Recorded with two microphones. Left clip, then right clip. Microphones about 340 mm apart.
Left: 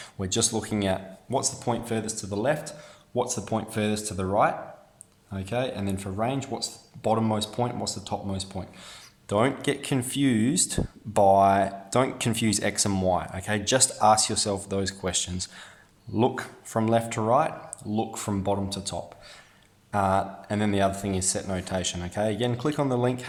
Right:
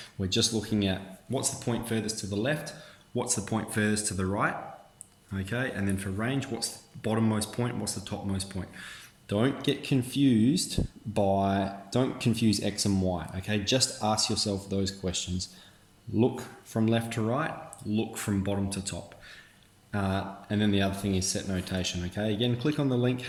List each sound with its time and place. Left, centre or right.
0.0 s speech: left
3.2 s speech: centre; by 12.9 s left
12.9 s speech: left
13.1 s speech: left